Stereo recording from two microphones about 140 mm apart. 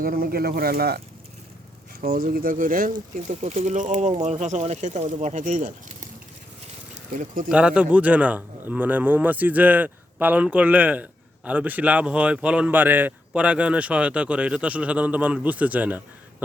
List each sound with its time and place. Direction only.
0.0 s speech: 90° right
3.2 s speech: 55° right (ahead or behind)
7.2 s speech: 80° right
7.5 s speech: 10° right (ahead or behind)